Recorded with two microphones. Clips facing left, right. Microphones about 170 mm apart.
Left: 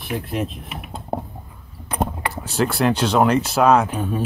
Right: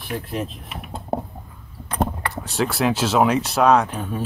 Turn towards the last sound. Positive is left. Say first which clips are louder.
# left 1 dB
turn(degrees=5)  # may be behind; listen again after turning